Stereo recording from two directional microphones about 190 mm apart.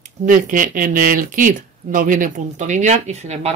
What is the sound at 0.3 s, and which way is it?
Speech, 45° right (ahead or behind).